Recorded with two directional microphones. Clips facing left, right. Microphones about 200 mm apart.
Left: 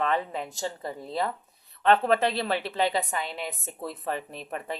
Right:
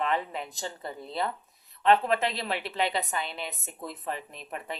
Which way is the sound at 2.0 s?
35° left (ahead or behind).